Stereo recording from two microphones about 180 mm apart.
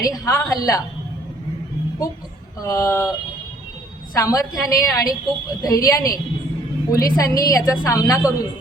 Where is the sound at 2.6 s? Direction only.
20° left (ahead or behind).